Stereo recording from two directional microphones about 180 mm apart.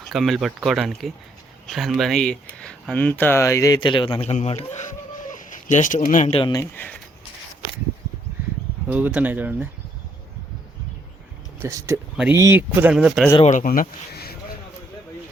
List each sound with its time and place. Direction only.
0.1 s speech: centre (ahead or behind); by 6.3 s 45° left (ahead or behind)
6.3 s speech: 25° left (ahead or behind)
8.9 s speech: 10° right (ahead or behind)
11.6 s speech: 15° right (ahead or behind)
12.1 s speech: 5° right (ahead or behind)
13.4 s speech: 45° left (ahead or behind)